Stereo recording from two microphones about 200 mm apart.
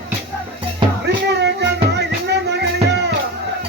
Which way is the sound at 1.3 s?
60° right (ahead or behind).